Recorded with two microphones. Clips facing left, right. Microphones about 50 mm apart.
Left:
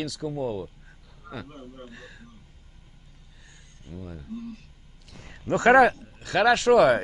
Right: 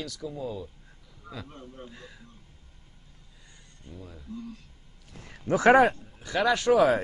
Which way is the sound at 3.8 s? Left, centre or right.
Left.